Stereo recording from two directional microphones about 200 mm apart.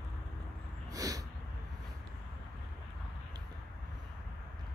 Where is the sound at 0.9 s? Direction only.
15° right (ahead or behind).